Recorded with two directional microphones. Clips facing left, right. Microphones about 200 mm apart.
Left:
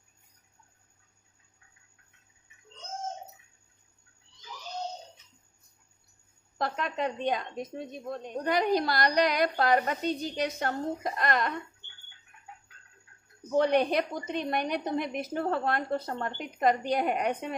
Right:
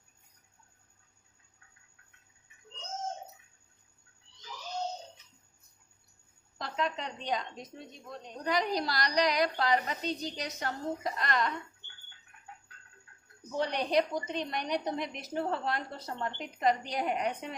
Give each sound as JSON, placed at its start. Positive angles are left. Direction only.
{"t": 6.6, "sound": "a woman's voice", "side_deg": 55}
{"t": 13.6, "sound": "a woman's voice", "side_deg": 55}